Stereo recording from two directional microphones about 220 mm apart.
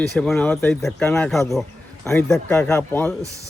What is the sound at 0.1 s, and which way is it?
Speech, 5° left (ahead or behind).